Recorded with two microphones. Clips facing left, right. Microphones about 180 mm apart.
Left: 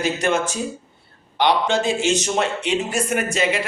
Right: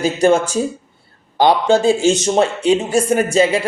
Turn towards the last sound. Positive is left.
turn(degrees=-30)  # may be behind; listen again after turning